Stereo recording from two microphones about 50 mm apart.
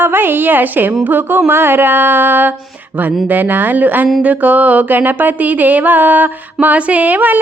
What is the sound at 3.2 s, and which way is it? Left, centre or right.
Music, right.